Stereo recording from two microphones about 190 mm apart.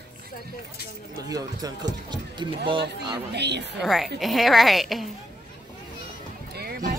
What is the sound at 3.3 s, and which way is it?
Speech, 65° right (ahead or behind).